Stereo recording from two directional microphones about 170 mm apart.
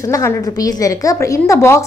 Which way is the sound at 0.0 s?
20° left (ahead or behind).